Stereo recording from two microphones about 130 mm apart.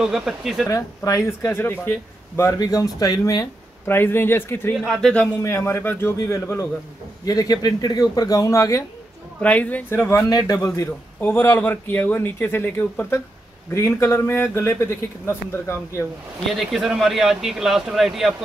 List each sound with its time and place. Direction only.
0.0 s speech: 5° right (ahead or behind)
0.7 s speech: 25° left (ahead or behind)
2.6 s speech: 30° left (ahead or behind)
3.8 s speech: 15° left (ahead or behind)
4.7 s speech: centre (ahead or behind)
5.4 s speech: 20° left (ahead or behind)
9.4 s speech: 10° left (ahead or behind); by 10.7 s 25° left (ahead or behind)
11.1 s speech: 15° left (ahead or behind)
16.5 s speech: 5° right (ahead or behind)